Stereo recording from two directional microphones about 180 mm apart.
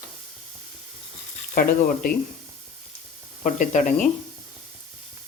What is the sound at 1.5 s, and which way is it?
Speech, 55° left (ahead or behind).